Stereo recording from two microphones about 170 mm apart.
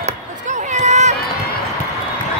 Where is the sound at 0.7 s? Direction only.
45° right (ahead or behind).